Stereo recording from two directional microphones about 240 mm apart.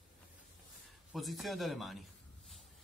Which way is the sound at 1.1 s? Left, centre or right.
Centre.